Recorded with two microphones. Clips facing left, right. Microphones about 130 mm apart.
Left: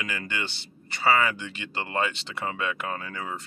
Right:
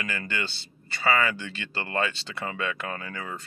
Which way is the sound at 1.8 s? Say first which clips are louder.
Left 1 dB; 15° left (ahead or behind).